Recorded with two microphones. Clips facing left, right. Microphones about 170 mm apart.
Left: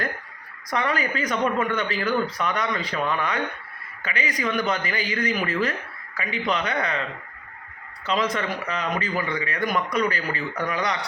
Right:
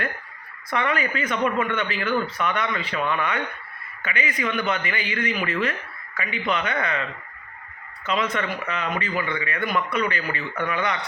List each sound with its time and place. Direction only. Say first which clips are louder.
0.7 s speech: even; 35° left (ahead or behind)
8.0 s speech: even; 35° left (ahead or behind)